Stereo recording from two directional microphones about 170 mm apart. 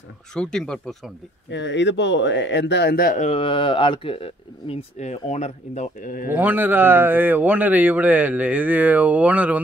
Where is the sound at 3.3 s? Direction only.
30° left (ahead or behind); by 6.2 s 50° left (ahead or behind).